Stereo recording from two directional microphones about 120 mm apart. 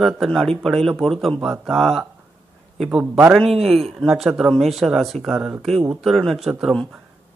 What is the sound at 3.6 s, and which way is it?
A man's voice, centre (ahead or behind).